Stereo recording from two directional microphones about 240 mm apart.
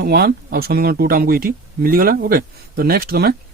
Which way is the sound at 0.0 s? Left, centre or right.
Right.